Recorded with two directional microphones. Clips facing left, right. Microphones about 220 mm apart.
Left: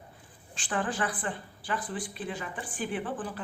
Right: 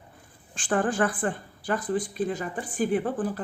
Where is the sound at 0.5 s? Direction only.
50° right (ahead or behind).